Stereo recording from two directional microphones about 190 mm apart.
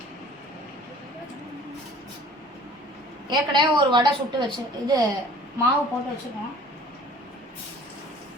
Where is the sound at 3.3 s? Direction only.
25° right (ahead or behind).